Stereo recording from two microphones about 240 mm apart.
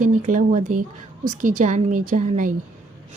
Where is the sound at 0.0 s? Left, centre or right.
Right.